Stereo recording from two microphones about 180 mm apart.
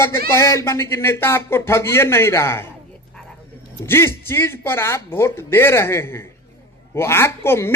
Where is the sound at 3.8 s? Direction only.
15° left (ahead or behind).